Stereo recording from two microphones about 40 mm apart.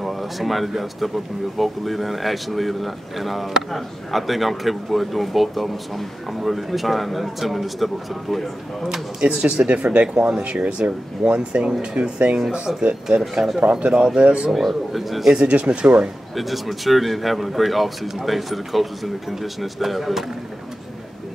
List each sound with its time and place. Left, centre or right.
0.0 s speech: centre
8.8 s speech: right
14.5 s speech: centre
15.4 s speech: right
16.3 s speech: centre